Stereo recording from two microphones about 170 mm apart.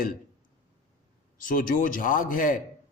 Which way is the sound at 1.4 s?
55° left (ahead or behind).